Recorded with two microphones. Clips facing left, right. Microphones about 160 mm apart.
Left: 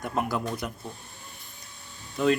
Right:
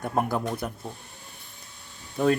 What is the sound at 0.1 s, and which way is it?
Speech, 45° right (ahead or behind).